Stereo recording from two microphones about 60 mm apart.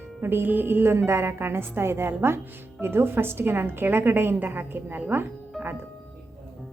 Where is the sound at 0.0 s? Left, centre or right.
Right.